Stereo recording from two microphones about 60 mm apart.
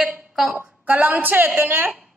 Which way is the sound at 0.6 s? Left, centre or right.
Right.